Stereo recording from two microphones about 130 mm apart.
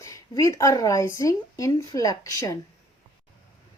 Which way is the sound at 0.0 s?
25° left (ahead or behind).